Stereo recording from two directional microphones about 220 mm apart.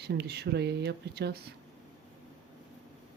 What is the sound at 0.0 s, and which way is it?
Speech, 50° right (ahead or behind).